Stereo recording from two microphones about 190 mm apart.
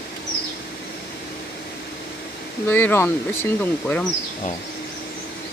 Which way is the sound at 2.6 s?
10° left (ahead or behind).